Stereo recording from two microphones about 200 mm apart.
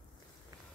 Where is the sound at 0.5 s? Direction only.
20° right (ahead or behind).